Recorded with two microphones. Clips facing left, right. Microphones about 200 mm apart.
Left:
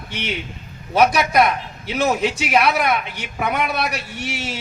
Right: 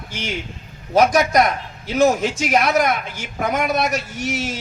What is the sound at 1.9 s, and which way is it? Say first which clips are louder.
A man's voice: right 3 dB; 45° right (ahead or behind).